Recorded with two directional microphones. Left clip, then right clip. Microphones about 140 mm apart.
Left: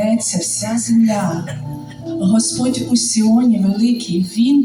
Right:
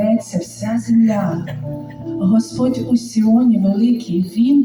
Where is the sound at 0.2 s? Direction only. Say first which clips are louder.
Left 3 dB; 20° right (ahead or behind).